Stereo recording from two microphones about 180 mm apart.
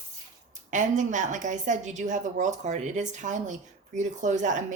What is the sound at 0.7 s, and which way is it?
Speech, 45° right (ahead or behind).